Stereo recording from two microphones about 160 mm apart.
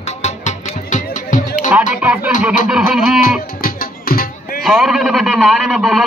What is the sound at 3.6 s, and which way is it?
Music, 65° left (ahead or behind).